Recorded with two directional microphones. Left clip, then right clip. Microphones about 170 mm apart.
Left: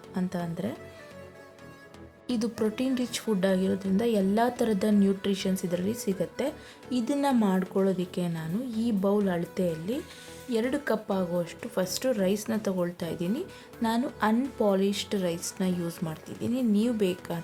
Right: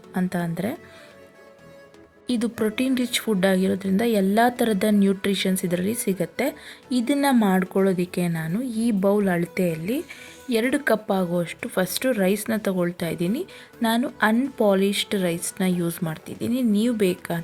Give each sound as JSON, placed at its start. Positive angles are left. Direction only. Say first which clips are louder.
{"t": 0.1, "sound": "speech", "louder": "right 6 dB", "side_deg": -20}
{"t": 2.2, "sound": "a woman's voice", "louder": "right 4 dB", "side_deg": -15}